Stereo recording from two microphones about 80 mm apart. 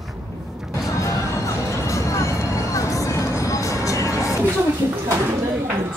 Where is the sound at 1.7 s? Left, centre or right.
Left.